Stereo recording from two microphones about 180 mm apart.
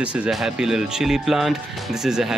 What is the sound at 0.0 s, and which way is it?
Speech, 5° right (ahead or behind).